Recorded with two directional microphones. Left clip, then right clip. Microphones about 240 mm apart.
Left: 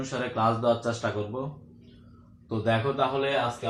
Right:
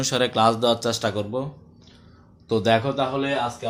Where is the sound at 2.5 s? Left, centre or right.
Right.